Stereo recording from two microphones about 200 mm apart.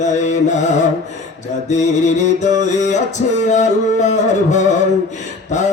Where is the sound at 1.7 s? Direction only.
35° left (ahead or behind).